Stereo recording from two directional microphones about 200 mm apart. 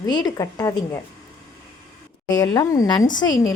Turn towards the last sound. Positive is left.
turn(degrees=20)  # may be behind; listen again after turning